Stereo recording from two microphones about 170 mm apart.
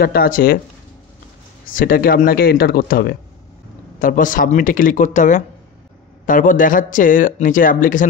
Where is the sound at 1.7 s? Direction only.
55° left (ahead or behind).